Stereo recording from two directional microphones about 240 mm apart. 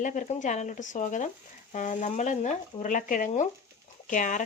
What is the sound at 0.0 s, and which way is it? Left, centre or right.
Speech, left.